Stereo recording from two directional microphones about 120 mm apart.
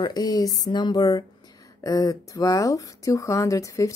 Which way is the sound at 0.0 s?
35° left (ahead or behind).